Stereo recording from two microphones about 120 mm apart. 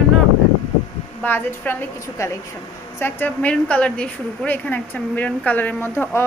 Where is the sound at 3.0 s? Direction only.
15° left (ahead or behind).